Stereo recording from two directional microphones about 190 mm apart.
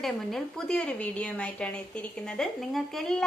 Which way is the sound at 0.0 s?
Centre (ahead or behind).